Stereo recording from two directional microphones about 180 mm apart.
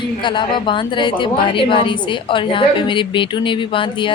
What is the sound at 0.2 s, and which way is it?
A woman's voice, 25° left (ahead or behind).